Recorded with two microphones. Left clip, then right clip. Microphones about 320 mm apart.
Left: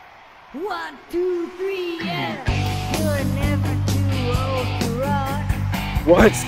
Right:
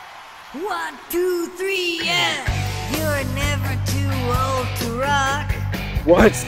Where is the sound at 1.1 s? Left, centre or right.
Right.